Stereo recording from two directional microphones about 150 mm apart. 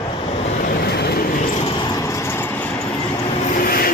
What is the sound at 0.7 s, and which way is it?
Vehicle, 90° left.